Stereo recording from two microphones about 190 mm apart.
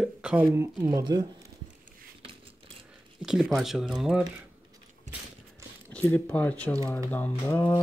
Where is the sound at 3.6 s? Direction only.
Centre (ahead or behind).